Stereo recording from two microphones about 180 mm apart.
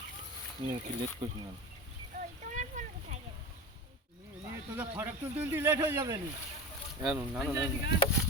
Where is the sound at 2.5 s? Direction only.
45° right (ahead or behind).